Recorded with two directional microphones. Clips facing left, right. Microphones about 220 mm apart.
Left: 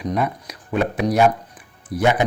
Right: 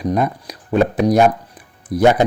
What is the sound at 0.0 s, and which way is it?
Speech, 35° right (ahead or behind).